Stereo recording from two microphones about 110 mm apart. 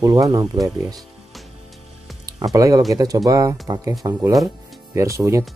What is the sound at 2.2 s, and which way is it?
Speech, 35° right (ahead or behind).